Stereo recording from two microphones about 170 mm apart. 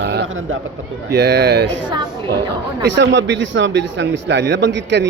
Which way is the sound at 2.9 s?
90° right.